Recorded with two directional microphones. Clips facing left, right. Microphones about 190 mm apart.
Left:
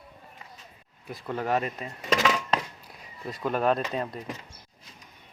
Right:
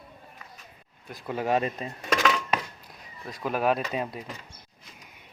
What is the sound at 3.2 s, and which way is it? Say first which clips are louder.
Speech: left 1 dB; centre (ahead or behind).